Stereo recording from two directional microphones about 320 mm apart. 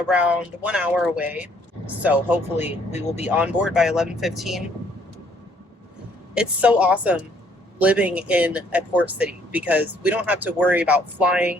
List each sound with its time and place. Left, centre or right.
0.1 s speech: centre
2.6 s speech: left
3.3 s speech: centre
6.3 s speech: centre